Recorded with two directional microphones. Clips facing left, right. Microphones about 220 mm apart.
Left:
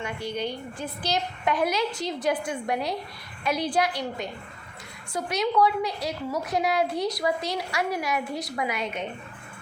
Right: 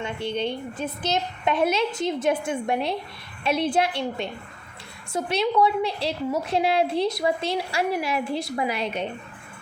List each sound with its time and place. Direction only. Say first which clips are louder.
0.0 s a woman's voice: right 3 dB; 25° right (ahead or behind)